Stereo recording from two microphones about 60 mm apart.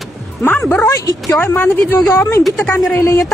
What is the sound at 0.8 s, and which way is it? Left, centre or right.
Speech, left.